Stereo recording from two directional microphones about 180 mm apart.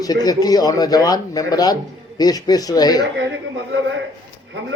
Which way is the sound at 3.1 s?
90° right.